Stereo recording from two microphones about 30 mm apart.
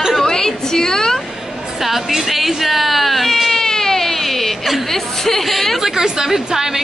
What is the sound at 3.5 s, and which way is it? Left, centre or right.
Baby cry, centre.